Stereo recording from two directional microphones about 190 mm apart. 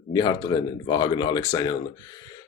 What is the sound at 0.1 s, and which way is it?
Speech, 20° left (ahead or behind).